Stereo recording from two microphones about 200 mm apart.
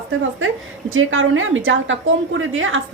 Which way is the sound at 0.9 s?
85° right.